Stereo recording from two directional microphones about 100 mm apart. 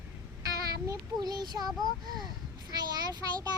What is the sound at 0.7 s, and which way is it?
Speech, 40° right (ahead or behind).